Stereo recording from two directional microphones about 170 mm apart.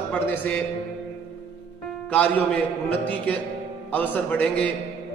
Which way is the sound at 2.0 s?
10° left (ahead or behind).